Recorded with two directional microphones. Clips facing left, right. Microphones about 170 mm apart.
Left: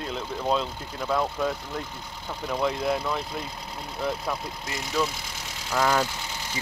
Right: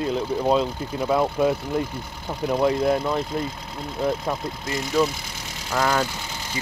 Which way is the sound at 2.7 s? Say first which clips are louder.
Right 6 dB; 5° right (ahead or behind).